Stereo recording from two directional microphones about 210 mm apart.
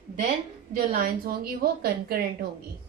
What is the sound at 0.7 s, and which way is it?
A woman's voice, 45° right (ahead or behind).